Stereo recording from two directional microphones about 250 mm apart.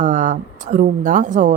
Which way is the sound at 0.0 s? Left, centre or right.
Right.